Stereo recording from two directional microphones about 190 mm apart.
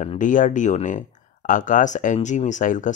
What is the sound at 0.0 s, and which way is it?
Speech, 40° left (ahead or behind).